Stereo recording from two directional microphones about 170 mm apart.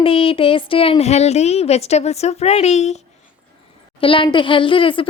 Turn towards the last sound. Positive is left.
turn(degrees=30)  # may be behind; listen again after turning